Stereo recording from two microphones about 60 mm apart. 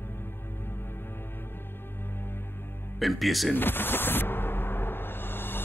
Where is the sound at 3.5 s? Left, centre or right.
Left.